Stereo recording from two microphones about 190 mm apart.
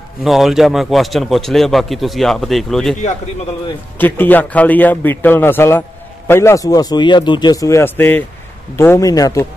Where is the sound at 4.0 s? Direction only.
10° left (ahead or behind).